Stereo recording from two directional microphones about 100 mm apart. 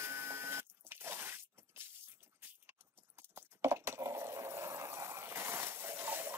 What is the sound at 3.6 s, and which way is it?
Water, 25° right (ahead or behind).